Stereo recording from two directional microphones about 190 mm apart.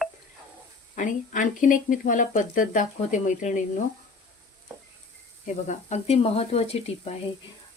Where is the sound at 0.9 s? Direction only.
40° left (ahead or behind).